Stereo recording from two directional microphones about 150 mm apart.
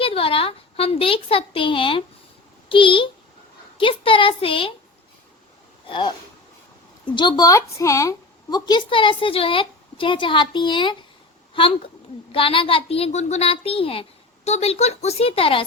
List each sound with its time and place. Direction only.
0.0 s a child's voice: 40° left (ahead or behind)
5.9 s a woman's voice: 35° left (ahead or behind)
12.3 s a woman's voice: 35° left (ahead or behind)